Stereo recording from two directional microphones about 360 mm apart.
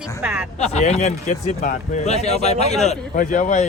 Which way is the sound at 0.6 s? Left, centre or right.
Centre.